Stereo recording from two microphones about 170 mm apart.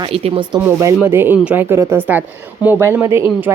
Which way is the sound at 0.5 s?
10° right (ahead or behind).